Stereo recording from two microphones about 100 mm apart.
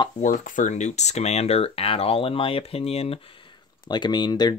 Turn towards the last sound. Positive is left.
turn(degrees=45)  # may be behind; listen again after turning